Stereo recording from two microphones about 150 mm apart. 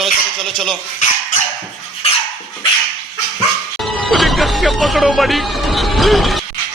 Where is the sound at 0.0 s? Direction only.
Centre (ahead or behind).